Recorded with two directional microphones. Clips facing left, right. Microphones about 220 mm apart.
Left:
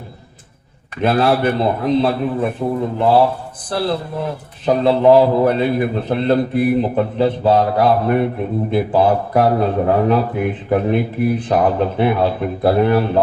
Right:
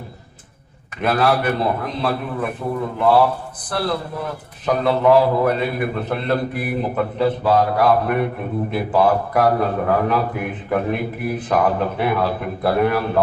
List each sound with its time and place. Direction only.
1.0 s a man's voice: 30° left (ahead or behind)